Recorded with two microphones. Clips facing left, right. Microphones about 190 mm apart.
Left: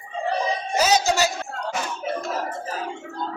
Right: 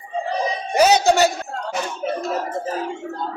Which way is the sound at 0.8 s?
60° right (ahead or behind).